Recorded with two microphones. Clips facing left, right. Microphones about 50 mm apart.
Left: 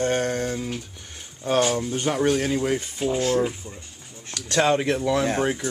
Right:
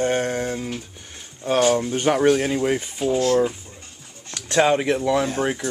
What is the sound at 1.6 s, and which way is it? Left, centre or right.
Speech, right.